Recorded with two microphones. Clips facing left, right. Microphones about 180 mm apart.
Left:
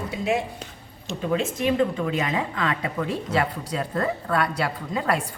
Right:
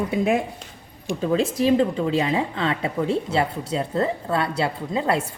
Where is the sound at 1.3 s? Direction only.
35° right (ahead or behind).